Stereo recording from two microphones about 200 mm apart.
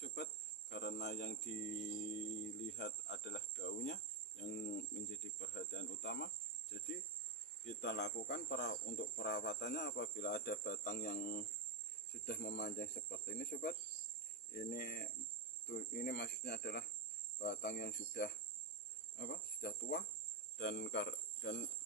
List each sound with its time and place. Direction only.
0.0 s cricket: 55° left (ahead or behind)
2.6 s cricket: 60° left (ahead or behind)